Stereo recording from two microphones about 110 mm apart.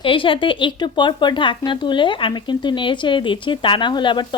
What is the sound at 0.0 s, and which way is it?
Speech, 50° left (ahead or behind).